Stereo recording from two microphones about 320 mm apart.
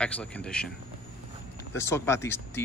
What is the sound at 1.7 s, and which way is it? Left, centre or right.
Speech, centre.